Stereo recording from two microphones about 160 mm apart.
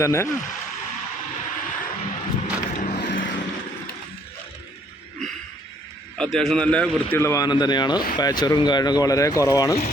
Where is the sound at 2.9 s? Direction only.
90° left.